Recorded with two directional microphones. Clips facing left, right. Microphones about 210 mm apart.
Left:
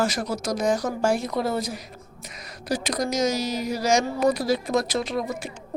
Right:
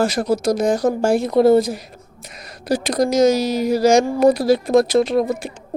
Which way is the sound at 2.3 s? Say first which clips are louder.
Right 7 dB; 60° right (ahead or behind).